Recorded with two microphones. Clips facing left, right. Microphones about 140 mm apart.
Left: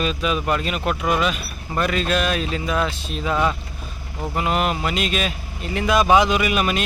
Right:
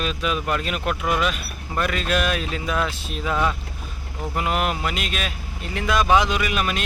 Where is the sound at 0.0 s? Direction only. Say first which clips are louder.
Left 3 dB; centre (ahead or behind).